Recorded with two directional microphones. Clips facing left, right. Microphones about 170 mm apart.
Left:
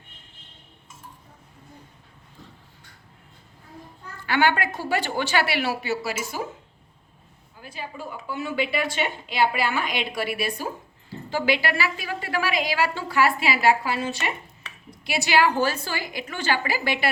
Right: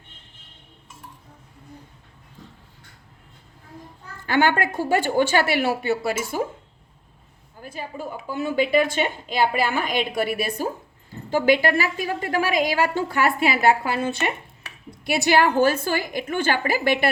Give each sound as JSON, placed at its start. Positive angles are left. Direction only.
{"t": 4.3, "sound": "a woman's voice", "side_deg": -45}
{"t": 7.6, "sound": "a woman's voice", "side_deg": -45}